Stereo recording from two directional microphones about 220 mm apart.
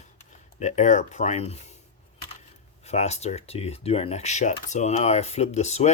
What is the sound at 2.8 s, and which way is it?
Speech, 30° left (ahead or behind).